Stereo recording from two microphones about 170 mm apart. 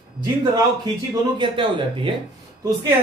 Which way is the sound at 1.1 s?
25° right (ahead or behind).